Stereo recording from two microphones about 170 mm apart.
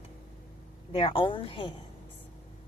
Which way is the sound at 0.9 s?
30° left (ahead or behind).